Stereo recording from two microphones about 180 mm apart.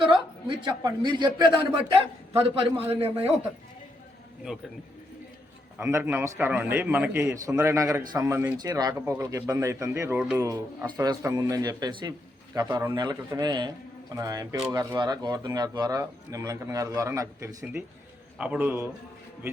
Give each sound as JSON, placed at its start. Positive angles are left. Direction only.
{"t": 0.1, "sound": "a man's voice", "side_deg": -25}
{"t": 5.8, "sound": "a man's voice", "side_deg": -15}
{"t": 18.3, "sound": "speech", "side_deg": -5}